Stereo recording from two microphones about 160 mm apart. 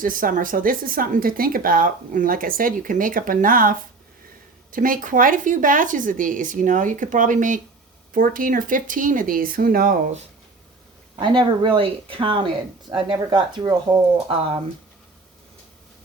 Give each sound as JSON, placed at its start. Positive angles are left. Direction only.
{"t": 0.0, "sound": "speech", "side_deg": -60}
{"t": 11.2, "sound": "speech", "side_deg": -30}